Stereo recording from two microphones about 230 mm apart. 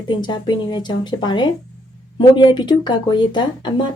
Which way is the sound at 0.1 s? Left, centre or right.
Centre.